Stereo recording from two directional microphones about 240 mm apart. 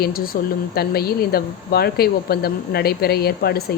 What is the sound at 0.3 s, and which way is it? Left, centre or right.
Speech, left.